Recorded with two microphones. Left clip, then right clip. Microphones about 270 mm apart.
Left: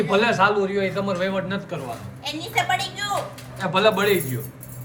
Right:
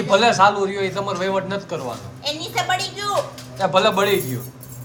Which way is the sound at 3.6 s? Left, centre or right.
Centre.